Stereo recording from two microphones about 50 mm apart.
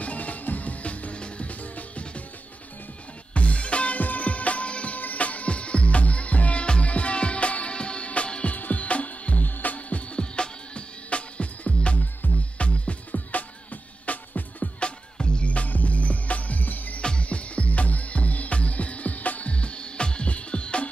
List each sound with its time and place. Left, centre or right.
0.0 s music: left
3.3 s music: left
12.0 s music: left
12.5 s music: left
17.0 s music: left